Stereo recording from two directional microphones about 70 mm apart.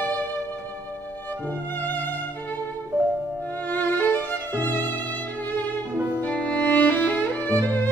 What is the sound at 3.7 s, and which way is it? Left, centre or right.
Violin, left.